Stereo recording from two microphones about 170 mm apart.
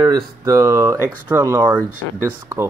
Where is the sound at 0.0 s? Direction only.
15° right (ahead or behind).